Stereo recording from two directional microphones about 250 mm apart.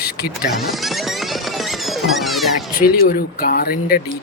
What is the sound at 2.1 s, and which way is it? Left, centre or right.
Speech, centre.